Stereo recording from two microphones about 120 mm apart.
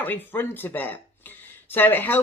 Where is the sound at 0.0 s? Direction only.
15° left (ahead or behind).